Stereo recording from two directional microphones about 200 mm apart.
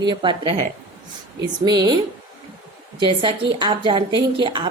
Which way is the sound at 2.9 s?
25° right (ahead or behind).